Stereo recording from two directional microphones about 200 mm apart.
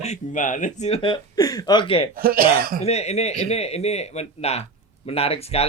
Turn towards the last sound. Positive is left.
turn(degrees=30)  # may be behind; listen again after turning